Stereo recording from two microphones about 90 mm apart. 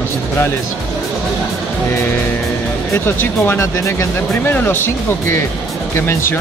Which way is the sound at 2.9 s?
30° left (ahead or behind).